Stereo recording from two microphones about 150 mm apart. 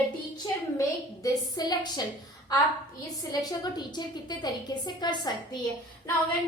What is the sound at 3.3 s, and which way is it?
A woman's voice, 25° left (ahead or behind).